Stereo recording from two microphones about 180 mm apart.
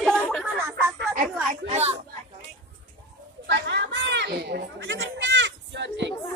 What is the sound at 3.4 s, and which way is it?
Sheep, 70° right (ahead or behind).